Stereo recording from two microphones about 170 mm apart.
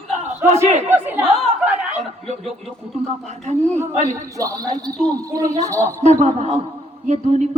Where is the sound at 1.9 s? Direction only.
40° right (ahead or behind).